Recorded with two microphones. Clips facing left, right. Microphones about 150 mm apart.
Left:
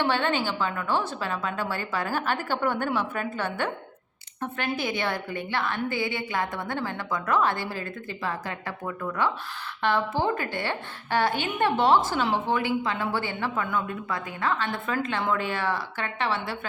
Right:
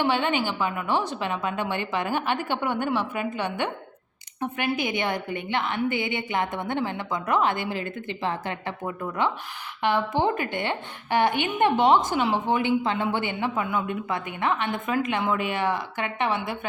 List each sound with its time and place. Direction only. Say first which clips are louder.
0.0 s a woman's voice: right 1 dB; 15° right (ahead or behind)